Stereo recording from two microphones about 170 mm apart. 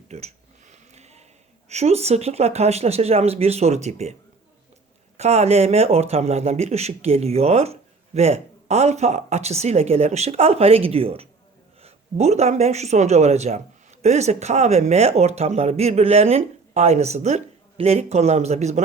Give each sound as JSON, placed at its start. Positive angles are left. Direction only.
{"t": 0.1, "sound": "a sound", "side_deg": -40}
{"t": 1.7, "sound": "speech", "side_deg": -40}
{"t": 5.1, "sound": "speech", "side_deg": -40}